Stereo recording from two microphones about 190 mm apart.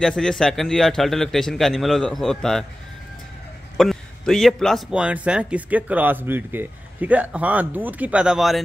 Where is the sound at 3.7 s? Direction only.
Centre (ahead or behind).